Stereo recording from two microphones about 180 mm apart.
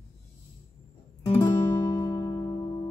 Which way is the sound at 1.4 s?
20° left (ahead or behind).